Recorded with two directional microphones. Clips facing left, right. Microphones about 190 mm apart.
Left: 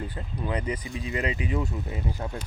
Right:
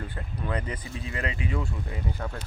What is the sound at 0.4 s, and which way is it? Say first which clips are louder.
Speech: left 3 dB; 15° left (ahead or behind).